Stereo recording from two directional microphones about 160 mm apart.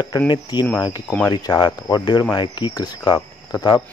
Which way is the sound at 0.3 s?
25° left (ahead or behind).